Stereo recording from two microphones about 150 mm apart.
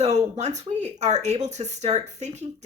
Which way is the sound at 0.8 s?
50° right (ahead or behind).